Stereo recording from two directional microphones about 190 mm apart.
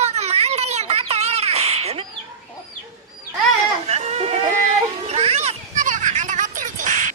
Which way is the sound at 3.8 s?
35° right (ahead or behind).